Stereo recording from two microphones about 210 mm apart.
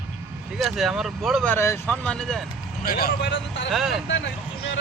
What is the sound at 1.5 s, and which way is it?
Speech, 10° left (ahead or behind).